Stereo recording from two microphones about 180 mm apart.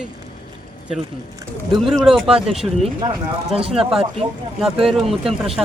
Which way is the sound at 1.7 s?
Centre (ahead or behind).